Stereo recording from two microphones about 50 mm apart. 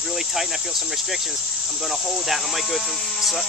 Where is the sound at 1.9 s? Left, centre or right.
Centre.